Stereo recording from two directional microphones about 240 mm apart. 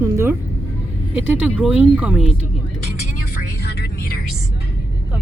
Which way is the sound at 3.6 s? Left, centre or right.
Left.